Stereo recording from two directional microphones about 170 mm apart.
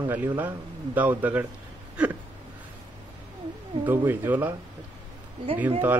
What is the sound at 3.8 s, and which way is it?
Speech, 10° right (ahead or behind).